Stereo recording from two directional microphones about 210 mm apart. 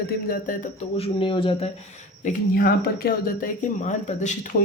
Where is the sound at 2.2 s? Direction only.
40° left (ahead or behind).